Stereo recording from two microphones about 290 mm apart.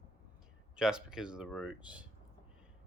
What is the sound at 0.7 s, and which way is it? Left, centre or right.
Speech, centre.